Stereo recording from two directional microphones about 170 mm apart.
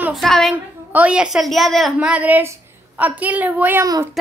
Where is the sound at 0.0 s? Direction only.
Centre (ahead or behind).